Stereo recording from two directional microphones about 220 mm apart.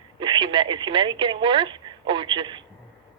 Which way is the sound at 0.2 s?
20° right (ahead or behind).